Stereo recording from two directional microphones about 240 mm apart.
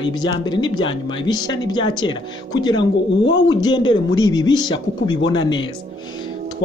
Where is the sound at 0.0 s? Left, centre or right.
Centre.